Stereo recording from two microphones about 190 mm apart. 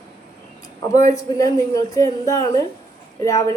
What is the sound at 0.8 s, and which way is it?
A woman's voice, 15° left (ahead or behind).